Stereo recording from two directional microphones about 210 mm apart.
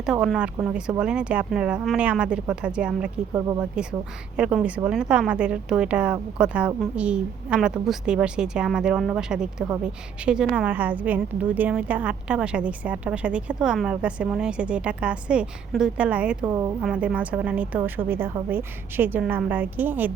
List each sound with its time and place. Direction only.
0.0 s a woman's voice: 5° right (ahead or behind)
16.5 s a woman's voice: 15° right (ahead or behind)
16.8 s a woman's voice: 5° right (ahead or behind)